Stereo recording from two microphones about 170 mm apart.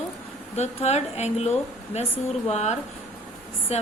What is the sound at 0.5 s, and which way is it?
Speech, 40° left (ahead or behind).